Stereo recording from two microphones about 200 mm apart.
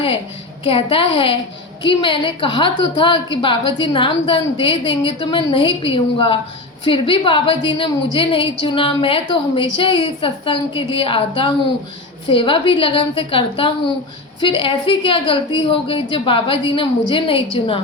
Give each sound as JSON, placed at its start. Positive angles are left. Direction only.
{"t": 0.6, "sound": "a woman's voice", "side_deg": 30}